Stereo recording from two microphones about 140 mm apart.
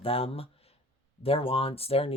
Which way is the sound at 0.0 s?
45° left (ahead or behind).